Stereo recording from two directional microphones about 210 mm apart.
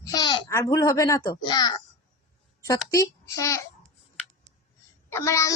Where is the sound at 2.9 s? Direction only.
15° left (ahead or behind).